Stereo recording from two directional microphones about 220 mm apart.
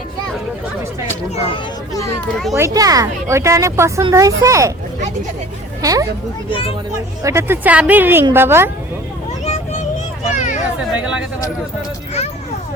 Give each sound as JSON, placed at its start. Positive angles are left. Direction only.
{"t": 1.5, "sound": "speech", "side_deg": 15}
{"t": 2.6, "sound": "speech", "side_deg": -15}
{"t": 5.8, "sound": "speech", "side_deg": -15}
{"t": 6.5, "sound": "speech", "side_deg": 25}
{"t": 7.2, "sound": "speech", "side_deg": -15}
{"t": 9.4, "sound": "vehicle", "side_deg": 30}
{"t": 10.3, "sound": "speech", "side_deg": 35}
{"t": 10.9, "sound": "speech", "side_deg": -5}